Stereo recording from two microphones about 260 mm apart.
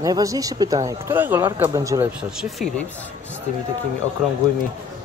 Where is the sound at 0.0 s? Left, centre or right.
Centre.